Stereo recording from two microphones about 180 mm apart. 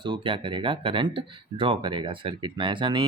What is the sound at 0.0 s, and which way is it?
A man's voice, 25° right (ahead or behind).